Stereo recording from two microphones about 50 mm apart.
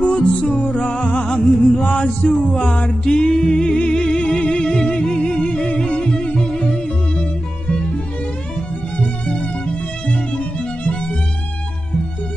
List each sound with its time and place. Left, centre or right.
0.0 s music: left
1.8 s chant: left
3.1 s music: centre
8.9 s music: left